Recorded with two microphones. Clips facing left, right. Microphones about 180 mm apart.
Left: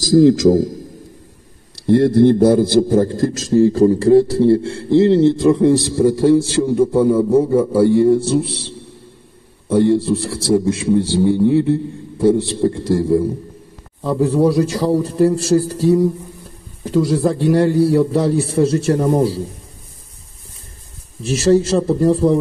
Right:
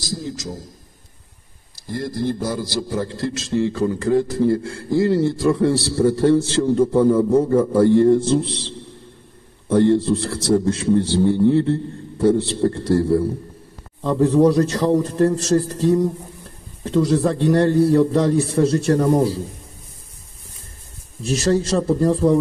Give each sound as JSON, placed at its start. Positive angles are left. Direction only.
{"t": 0.0, "sound": "a man's voice", "side_deg": 90}
{"t": 1.9, "sound": "a man's voice", "side_deg": 65}
{"t": 21.5, "sound": "a man's voice", "side_deg": 15}